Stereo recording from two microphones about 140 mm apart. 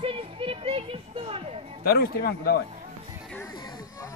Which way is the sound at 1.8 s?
90° left.